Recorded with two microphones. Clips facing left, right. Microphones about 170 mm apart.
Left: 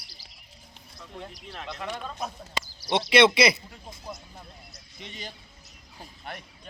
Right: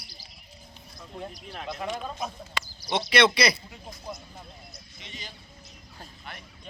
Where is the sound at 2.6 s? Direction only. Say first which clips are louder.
Left 1 dB; 40° left (ahead or behind).